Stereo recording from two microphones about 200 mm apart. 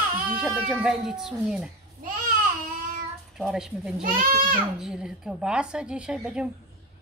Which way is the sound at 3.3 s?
Centre (ahead or behind).